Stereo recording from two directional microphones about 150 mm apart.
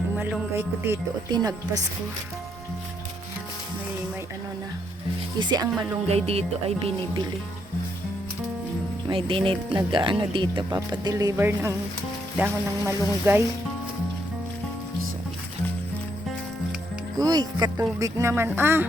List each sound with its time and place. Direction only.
0.2 s speech: 10° right (ahead or behind)
1.3 s speech: 25° right (ahead or behind)
5.4 s speech: 30° right (ahead or behind)
6.1 s speech: 45° right (ahead or behind)
9.0 s speech: 35° right (ahead or behind); by 13.4 s 15° right (ahead or behind)
17.2 s speech: 25° right (ahead or behind)